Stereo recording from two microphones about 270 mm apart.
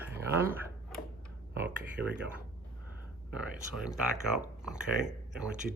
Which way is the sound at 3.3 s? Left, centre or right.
Centre.